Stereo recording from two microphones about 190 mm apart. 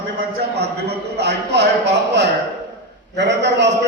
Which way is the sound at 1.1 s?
60° right (ahead or behind).